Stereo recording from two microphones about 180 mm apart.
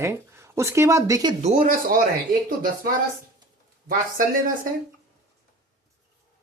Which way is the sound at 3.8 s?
50° right (ahead or behind).